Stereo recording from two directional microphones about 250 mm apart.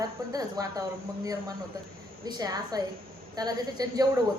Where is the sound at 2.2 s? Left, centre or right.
Centre.